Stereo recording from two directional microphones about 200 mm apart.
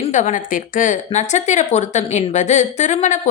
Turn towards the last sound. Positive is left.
turn(degrees=35)  # may be behind; listen again after turning